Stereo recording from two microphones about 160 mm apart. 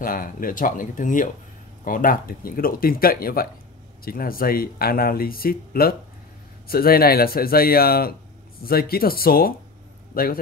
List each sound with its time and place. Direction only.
0.0 s speech: 60° left (ahead or behind)